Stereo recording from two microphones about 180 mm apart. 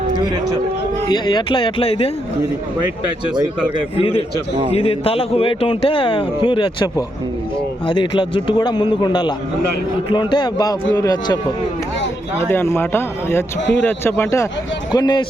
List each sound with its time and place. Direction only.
1.0 s a man's voice: 25° left (ahead or behind)
4.7 s a man's voice: 30° left (ahead or behind)
12.5 s a man's voice: 15° left (ahead or behind)